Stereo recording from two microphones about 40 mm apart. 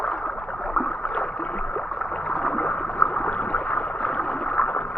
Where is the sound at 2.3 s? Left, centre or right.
Centre.